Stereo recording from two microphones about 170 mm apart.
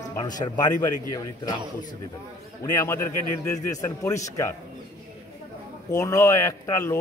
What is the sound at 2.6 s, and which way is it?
A man's voice, 15° left (ahead or behind).